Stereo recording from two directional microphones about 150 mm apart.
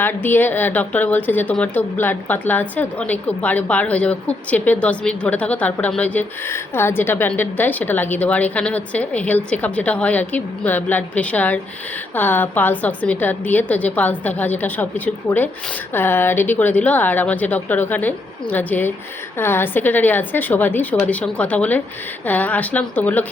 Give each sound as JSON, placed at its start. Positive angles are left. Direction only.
{"t": 0.0, "sound": "a woman's voice", "side_deg": 15}